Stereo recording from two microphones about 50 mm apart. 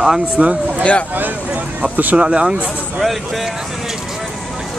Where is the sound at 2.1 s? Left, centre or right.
Centre.